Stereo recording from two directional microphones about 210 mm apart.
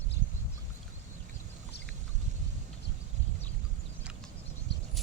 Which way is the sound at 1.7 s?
50° left (ahead or behind).